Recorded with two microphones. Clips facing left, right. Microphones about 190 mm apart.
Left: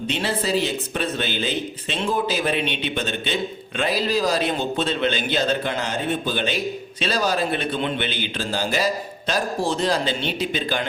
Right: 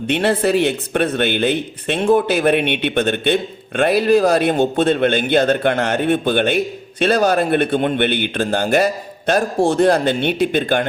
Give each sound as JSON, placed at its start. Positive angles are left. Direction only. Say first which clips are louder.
{"t": 0.1, "sound": "speech", "louder": "right 8 dB", "side_deg": -60}